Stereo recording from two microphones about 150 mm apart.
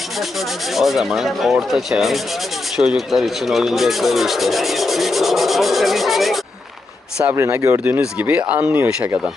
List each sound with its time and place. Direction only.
0.2 s speech: centre (ahead or behind)
7.2 s speech: 15° right (ahead or behind)